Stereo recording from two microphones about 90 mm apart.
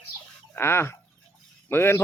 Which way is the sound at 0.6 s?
25° left (ahead or behind).